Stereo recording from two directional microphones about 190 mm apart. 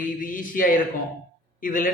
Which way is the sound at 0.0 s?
45° left (ahead or behind).